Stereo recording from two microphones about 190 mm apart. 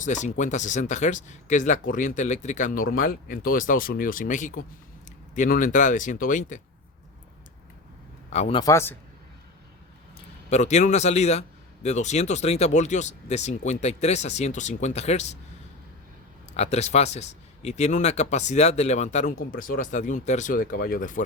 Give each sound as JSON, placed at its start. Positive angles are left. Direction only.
{"t": 0.0, "sound": "speech", "side_deg": 40}
{"t": 8.3, "sound": "speech", "side_deg": 35}
{"t": 8.6, "sound": "speech", "side_deg": 15}
{"t": 10.5, "sound": "speech", "side_deg": 35}
{"t": 16.6, "sound": "speech", "side_deg": 35}